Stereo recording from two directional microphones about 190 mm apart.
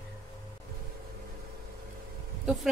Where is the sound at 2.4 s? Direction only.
Centre (ahead or behind).